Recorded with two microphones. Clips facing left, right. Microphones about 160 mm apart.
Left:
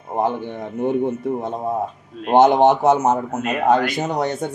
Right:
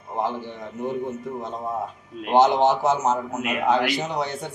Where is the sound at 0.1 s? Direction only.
55° left (ahead or behind).